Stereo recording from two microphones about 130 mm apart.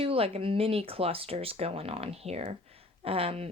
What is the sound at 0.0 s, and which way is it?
Speech, 50° right (ahead or behind).